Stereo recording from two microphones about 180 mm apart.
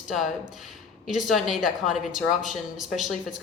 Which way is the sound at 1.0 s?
Centre (ahead or behind).